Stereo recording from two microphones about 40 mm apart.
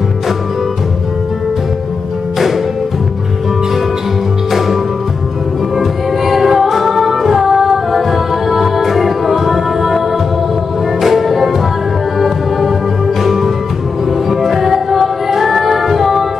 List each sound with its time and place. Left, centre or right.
2.3 s music: centre
4.5 s music: centre
5.8 s music: centre